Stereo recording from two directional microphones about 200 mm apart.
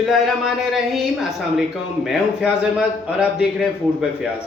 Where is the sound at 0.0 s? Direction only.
Centre (ahead or behind).